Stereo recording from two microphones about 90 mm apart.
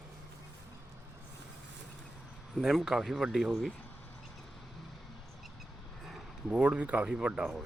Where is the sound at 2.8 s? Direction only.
5° right (ahead or behind).